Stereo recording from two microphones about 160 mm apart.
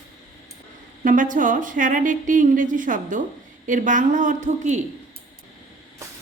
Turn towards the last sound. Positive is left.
turn(degrees=-45)  # may be behind; listen again after turning